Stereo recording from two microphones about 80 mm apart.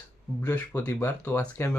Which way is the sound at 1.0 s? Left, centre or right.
Left.